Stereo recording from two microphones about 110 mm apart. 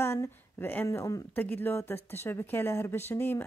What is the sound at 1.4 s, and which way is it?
Speech, 15° left (ahead or behind).